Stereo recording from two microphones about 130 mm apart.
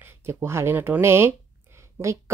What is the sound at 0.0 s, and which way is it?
A woman's voice, 15° right (ahead or behind).